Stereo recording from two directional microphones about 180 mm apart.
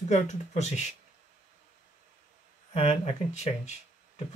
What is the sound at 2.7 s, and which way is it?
Speech, 35° left (ahead or behind).